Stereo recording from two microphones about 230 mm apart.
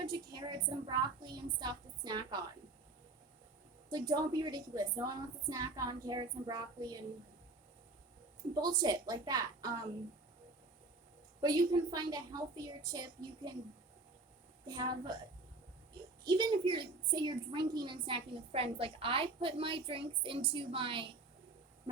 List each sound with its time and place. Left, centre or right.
0.0 s a woman's voice: centre
3.8 s a woman's voice: centre
8.6 s a woman's voice: centre
11.3 s a woman's voice: centre
14.7 s a woman's voice: centre
16.2 s a woman's voice: centre